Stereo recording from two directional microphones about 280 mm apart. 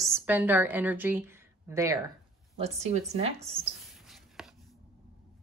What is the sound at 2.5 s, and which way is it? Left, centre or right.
Speech, right.